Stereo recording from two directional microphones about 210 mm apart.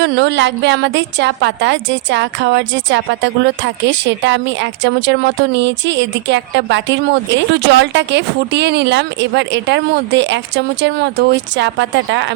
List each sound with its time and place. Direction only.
0.0 s a woman's voice: 55° right (ahead or behind)